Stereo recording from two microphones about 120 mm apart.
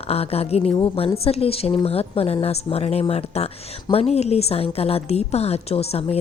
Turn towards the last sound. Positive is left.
turn(degrees=60)  # may be behind; listen again after turning